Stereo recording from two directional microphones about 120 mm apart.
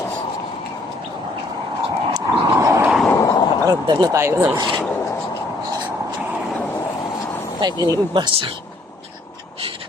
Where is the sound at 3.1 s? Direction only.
30° left (ahead or behind).